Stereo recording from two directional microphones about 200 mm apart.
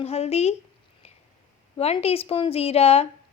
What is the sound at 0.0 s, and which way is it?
Speech, 30° left (ahead or behind).